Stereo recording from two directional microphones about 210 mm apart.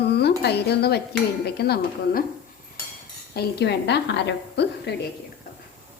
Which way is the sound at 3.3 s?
50° left (ahead or behind).